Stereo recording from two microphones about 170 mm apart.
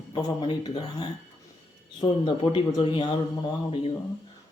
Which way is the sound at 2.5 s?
30° left (ahead or behind).